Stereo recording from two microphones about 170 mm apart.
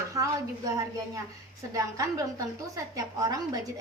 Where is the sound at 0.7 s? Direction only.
20° right (ahead or behind).